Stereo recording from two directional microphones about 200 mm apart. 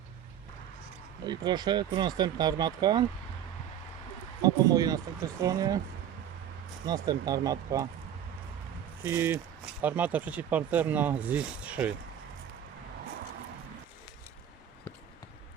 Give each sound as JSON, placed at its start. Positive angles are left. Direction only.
{"t": 1.2, "sound": "speech", "side_deg": -20}
{"t": 4.4, "sound": "speech", "side_deg": -20}
{"t": 6.8, "sound": "speech", "side_deg": -20}
{"t": 9.0, "sound": "speech", "side_deg": -10}